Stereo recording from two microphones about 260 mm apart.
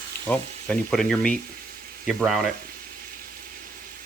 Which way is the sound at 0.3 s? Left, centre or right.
Centre.